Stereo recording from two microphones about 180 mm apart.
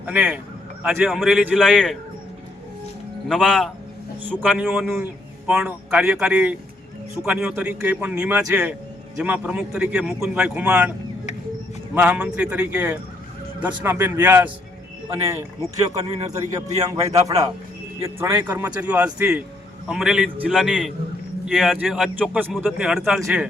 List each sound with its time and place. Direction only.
0.0 s a man's voice: 10° right (ahead or behind)
3.2 s a man's voice: centre (ahead or behind)
11.9 s a man's voice: 5° right (ahead or behind)